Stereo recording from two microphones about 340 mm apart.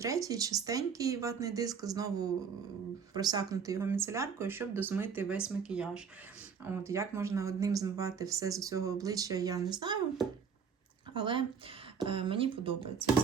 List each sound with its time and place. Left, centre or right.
0.0 s speech: centre